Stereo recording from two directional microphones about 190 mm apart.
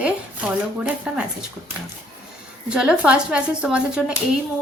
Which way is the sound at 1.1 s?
5° right (ahead or behind).